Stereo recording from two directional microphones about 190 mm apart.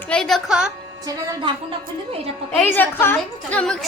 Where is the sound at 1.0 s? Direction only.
20° right (ahead or behind).